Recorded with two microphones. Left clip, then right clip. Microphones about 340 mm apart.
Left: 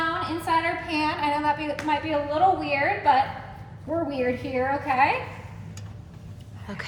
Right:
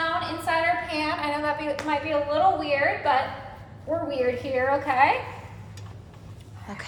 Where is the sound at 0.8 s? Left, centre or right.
Centre.